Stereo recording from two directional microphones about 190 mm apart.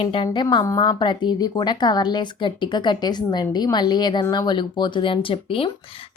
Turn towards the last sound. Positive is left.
turn(degrees=30)  # may be behind; listen again after turning